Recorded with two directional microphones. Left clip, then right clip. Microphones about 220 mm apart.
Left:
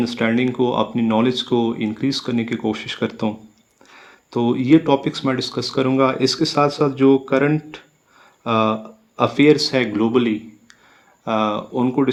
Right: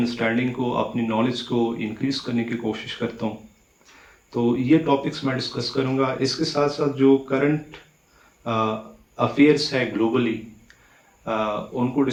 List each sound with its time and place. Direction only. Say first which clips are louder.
0.0 s speech: left 3 dB; 45° left (ahead or behind)
4.3 s speech: left 4 dB; 50° left (ahead or behind)